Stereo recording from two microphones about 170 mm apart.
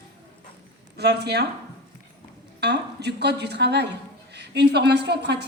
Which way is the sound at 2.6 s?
80° right.